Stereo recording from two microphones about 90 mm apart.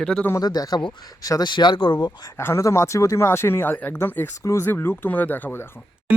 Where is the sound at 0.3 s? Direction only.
45° left (ahead or behind).